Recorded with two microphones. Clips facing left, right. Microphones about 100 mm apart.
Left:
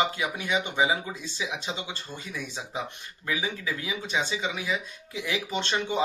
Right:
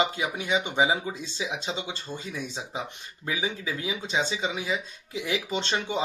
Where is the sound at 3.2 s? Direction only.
25° right (ahead or behind).